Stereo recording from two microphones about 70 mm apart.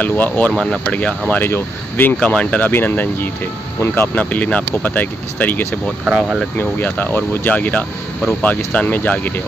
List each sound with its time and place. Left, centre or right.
0.0 s speech: left
0.5 s speech: centre
0.8 s speech: centre
1.4 s speech: left
2.1 s speech: centre
2.7 s speech: left
6.0 s speech: centre
6.5 s speech: left